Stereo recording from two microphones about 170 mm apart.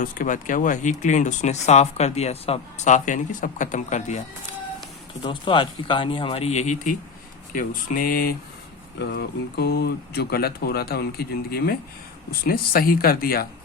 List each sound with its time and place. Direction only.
0.0 s speech: 50° left (ahead or behind)
5.2 s speech: 30° left (ahead or behind); by 8.4 s 60° left (ahead or behind)
9.0 s speech: 75° left (ahead or behind)